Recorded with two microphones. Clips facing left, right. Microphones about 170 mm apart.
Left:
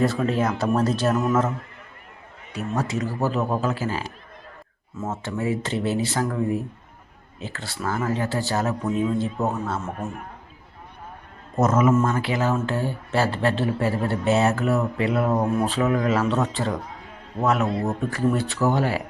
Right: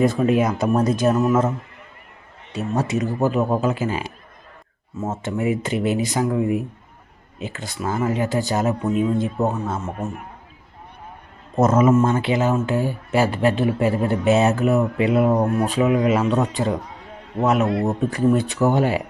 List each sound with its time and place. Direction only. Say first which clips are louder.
0.0 s speech: right 4 dB; 15° right (ahead or behind)
2.5 s speech: right 4 dB; 25° right (ahead or behind)
11.5 s speech: right 3 dB; 30° right (ahead or behind)